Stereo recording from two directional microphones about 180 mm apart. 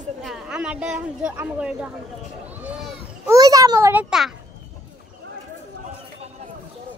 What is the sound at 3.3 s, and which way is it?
A child's voice, 20° right (ahead or behind).